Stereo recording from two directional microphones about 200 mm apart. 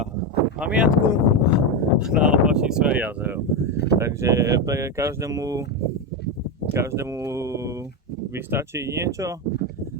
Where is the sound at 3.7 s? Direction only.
55° left (ahead or behind).